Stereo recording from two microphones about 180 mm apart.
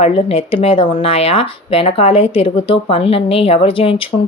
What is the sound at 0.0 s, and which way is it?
Speech, 35° left (ahead or behind).